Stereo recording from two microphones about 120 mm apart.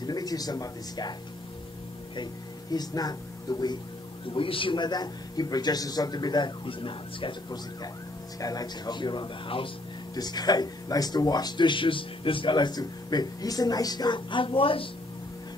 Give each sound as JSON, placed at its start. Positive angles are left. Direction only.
{"t": 0.0, "sound": "speech", "side_deg": 35}
{"t": 2.7, "sound": "speech", "side_deg": 35}
{"t": 4.3, "sound": "speech", "side_deg": 45}